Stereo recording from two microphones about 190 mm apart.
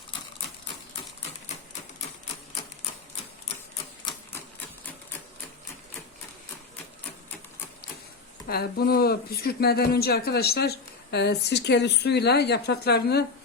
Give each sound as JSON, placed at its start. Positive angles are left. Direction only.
{"t": 8.4, "sound": "speech", "side_deg": 55}